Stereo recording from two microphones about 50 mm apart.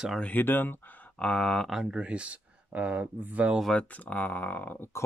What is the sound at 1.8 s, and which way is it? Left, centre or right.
Speech, centre.